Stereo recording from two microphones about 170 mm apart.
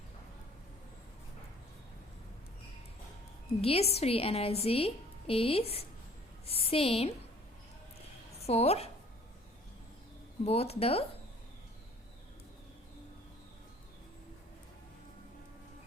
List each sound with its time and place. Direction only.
3.6 s a woman's voice: 35° left (ahead or behind)
8.4 s a woman's voice: 35° left (ahead or behind)
10.4 s a woman's voice: 35° left (ahead or behind)